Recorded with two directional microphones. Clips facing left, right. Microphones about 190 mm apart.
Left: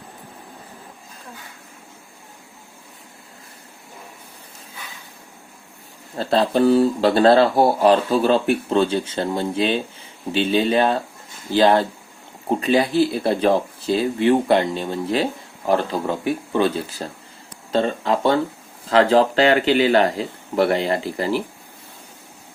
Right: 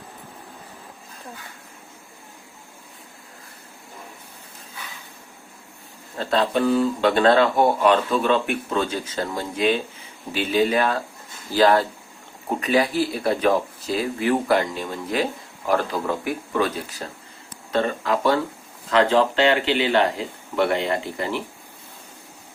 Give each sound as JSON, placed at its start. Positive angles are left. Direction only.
{"t": 6.1, "sound": "speech", "side_deg": 35}